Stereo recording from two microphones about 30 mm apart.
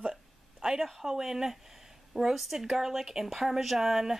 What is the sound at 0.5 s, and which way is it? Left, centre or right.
Speech, centre.